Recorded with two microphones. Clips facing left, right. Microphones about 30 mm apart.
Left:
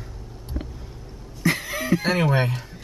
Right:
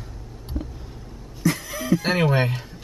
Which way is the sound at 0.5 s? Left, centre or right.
Left.